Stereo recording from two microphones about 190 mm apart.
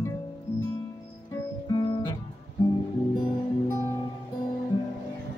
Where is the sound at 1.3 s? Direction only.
25° left (ahead or behind).